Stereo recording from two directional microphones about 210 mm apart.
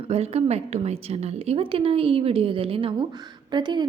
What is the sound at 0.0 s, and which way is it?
A woman's voice, 30° right (ahead or behind).